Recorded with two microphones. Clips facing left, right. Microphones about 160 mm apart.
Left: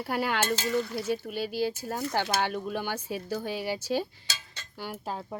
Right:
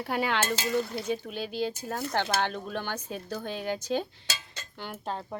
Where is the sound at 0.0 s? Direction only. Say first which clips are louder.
Even; centre (ahead or behind).